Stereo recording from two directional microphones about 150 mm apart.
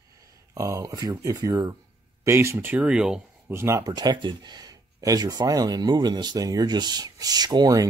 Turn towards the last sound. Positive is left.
turn(degrees=-25)  # may be behind; listen again after turning